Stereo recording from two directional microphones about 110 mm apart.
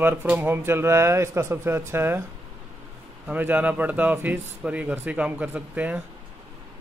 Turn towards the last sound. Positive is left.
turn(degrees=-15)  # may be behind; listen again after turning